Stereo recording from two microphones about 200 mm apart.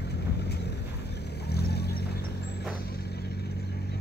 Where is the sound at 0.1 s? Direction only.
55° left (ahead or behind).